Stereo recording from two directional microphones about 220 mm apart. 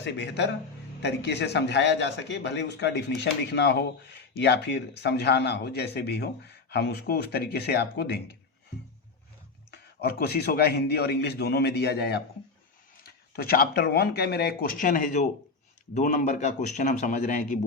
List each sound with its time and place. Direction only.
0.0 s a man's voice: 50° left (ahead or behind)
9.7 s a man's voice: 45° left (ahead or behind)